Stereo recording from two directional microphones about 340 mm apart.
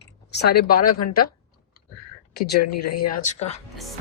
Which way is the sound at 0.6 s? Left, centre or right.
Left.